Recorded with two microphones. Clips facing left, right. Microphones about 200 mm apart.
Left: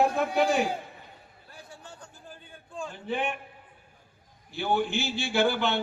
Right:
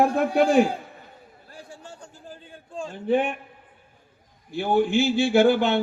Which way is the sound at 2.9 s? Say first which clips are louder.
Right 11 dB; 45° right (ahead or behind).